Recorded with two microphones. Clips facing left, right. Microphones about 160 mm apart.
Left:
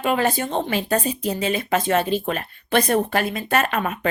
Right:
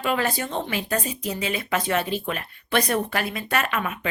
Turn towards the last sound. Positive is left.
turn(degrees=40)  # may be behind; listen again after turning